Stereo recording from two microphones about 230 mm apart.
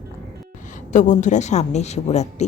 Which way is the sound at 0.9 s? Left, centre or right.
Left.